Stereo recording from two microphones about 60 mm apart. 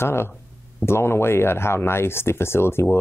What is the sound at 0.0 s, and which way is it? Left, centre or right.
Speech, left.